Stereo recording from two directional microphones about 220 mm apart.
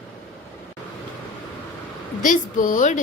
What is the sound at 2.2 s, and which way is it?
Speech, 35° left (ahead or behind).